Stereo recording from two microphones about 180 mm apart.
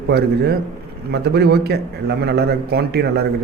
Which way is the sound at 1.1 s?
65° right (ahead or behind).